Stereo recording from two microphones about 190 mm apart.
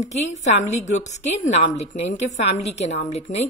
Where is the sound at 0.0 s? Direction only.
40° left (ahead or behind).